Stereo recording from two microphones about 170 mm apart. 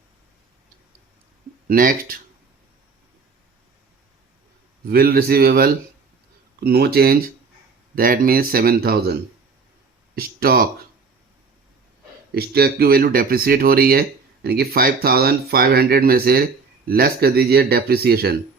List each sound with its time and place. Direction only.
1.6 s speech: 55° right (ahead or behind)
4.9 s speech: 60° right (ahead or behind)
10.2 s speech: 60° right (ahead or behind)
12.3 s speech: 65° right (ahead or behind)